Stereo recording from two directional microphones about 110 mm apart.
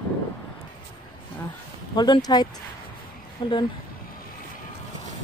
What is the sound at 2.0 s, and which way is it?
Speech, 40° left (ahead or behind).